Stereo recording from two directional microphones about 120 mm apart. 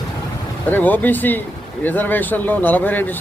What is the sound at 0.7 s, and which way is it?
Speech, 15° left (ahead or behind).